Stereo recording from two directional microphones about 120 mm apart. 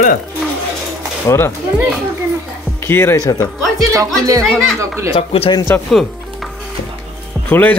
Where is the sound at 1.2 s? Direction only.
20° left (ahead or behind).